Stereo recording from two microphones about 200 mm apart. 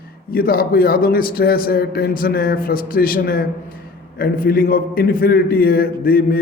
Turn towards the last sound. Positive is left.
turn(degrees=45)  # may be behind; listen again after turning